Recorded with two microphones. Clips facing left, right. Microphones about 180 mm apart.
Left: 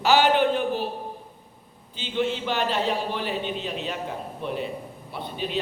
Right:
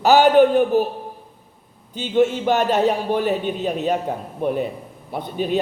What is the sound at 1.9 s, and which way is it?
A man's voice, 45° right (ahead or behind).